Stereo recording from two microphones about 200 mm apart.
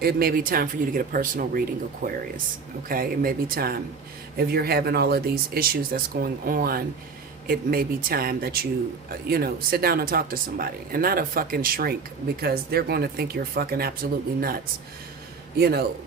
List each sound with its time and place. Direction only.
0.0 s speech: 50° right (ahead or behind)